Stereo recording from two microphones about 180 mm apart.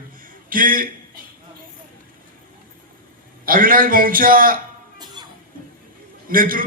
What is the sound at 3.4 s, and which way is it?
A man's voice, 50° right (ahead or behind).